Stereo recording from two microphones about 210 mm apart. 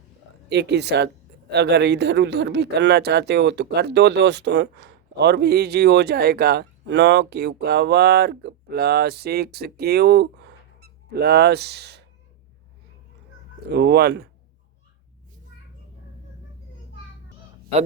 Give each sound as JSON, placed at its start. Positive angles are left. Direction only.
{"t": 0.4, "sound": "speech", "side_deg": -55}
{"t": 13.7, "sound": "speech", "side_deg": -50}